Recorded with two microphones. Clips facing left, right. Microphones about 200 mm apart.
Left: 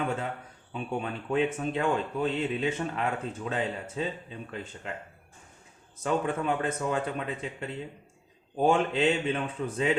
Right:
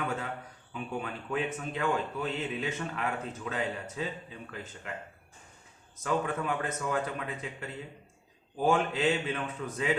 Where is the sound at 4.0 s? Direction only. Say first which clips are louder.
Left 5 dB; 25° left (ahead or behind).